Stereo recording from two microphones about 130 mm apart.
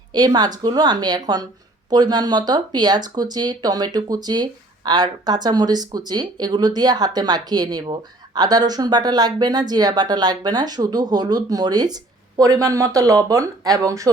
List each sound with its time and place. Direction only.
0.1 s speech: 30° right (ahead or behind)